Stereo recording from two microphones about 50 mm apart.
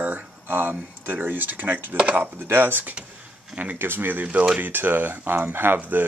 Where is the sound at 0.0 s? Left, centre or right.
Right.